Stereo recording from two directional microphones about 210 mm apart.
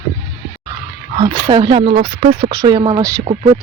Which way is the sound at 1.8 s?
35° right (ahead or behind).